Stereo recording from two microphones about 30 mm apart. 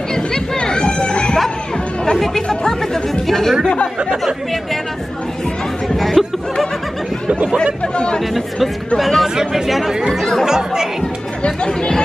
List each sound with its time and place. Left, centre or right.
0.6 s chatter: left
2.1 s speech: centre
3.6 s speech: left
5.9 s chatter: centre
7.8 s speech: left
8.4 s speech: centre
9.5 s speech: centre
10.4 s speech: centre
11.4 s speech: left